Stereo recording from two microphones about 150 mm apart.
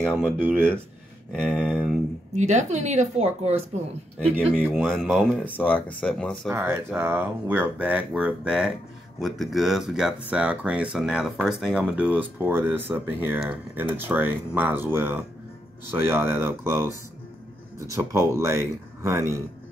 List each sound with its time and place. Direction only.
0.2 s speech: 5° right (ahead or behind)
1.3 s speech: 5° left (ahead or behind)
2.3 s speech: 50° right (ahead or behind)
4.7 s speech: 5° left (ahead or behind)
6.5 s speech: 15° right (ahead or behind)
17.9 s speech: 20° right (ahead or behind)